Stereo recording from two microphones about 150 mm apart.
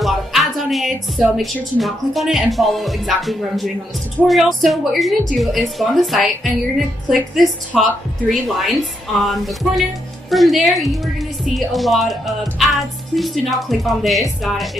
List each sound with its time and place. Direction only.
0.0 s a woman's voice: centre (ahead or behind)